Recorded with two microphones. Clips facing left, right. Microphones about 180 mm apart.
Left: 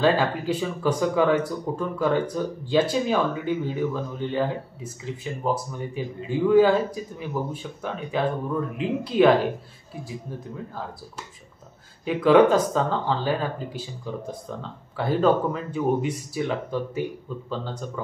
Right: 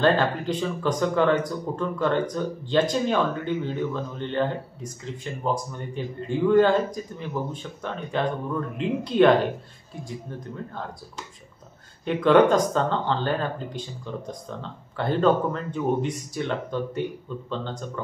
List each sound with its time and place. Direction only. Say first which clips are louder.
0.0 s speech: even; 5° left (ahead or behind)
12.0 s speech: left 1 dB; 5° left (ahead or behind)